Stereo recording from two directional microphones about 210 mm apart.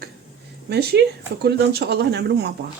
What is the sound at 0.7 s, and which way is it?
Speech, 55° right (ahead or behind).